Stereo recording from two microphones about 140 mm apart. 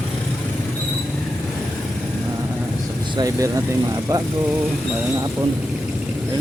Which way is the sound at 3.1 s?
25° right (ahead or behind).